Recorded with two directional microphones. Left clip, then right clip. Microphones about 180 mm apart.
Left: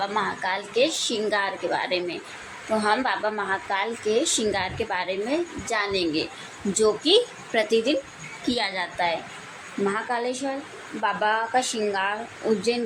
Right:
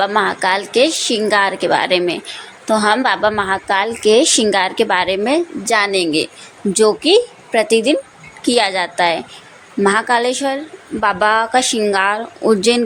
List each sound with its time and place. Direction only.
0.0 s a woman's voice: 55° right (ahead or behind)
7.1 s a woman's voice: 40° right (ahead or behind); by 12.8 s 60° right (ahead or behind)